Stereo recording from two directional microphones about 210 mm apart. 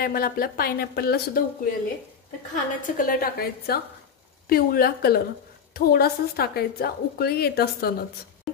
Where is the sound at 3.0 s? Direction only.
45° left (ahead or behind).